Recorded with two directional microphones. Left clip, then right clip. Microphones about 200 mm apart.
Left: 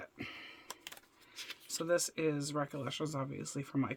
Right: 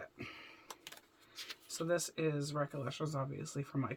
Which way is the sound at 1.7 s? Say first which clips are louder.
Left 3 dB; 40° left (ahead or behind).